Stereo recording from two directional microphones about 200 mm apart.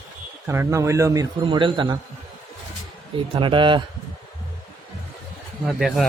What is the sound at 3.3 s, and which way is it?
Speech, 25° right (ahead or behind).